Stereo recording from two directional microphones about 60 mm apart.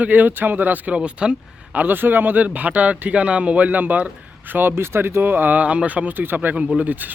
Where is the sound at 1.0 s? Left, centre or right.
Centre.